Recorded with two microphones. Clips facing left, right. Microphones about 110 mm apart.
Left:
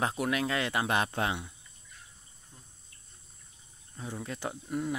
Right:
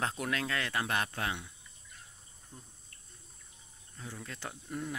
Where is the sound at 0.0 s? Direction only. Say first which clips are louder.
Left 5 dB; 15° left (ahead or behind).